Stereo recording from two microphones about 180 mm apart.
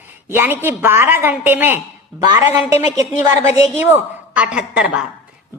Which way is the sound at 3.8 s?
10° right (ahead or behind).